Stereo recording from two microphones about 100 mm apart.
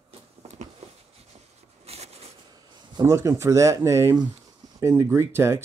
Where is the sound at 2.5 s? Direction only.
50° right (ahead or behind).